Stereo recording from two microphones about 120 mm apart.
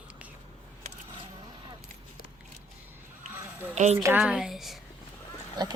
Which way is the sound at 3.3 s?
20° right (ahead or behind).